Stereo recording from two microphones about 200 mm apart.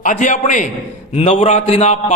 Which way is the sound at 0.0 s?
40° left (ahead or behind).